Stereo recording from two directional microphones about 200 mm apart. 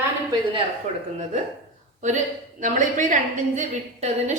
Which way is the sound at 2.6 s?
40° right (ahead or behind).